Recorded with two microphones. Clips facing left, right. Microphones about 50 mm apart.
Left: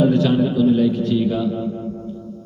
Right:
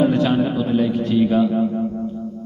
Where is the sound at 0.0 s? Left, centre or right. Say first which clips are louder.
Left 1 dB; right.